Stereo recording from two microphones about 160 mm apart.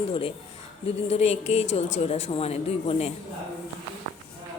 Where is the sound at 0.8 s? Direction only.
40° left (ahead or behind).